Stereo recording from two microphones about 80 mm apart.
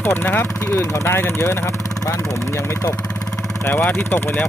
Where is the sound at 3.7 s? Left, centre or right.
Left.